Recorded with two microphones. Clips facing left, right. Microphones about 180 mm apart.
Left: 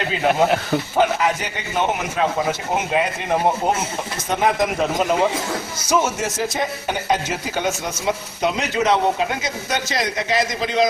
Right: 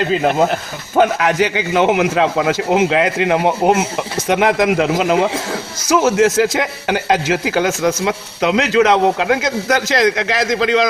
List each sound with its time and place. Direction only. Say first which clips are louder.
1.2 s a man's voice: right 7 dB; 90° right